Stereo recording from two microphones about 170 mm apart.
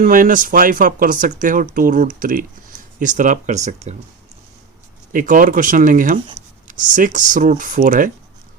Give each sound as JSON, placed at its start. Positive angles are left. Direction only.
{"t": 0.0, "sound": "speech", "side_deg": -55}
{"t": 5.1, "sound": "speech", "side_deg": -50}